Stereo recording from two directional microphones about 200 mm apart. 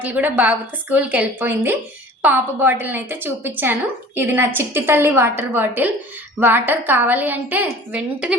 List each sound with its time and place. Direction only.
0.0 s a woman's voice: 10° right (ahead or behind)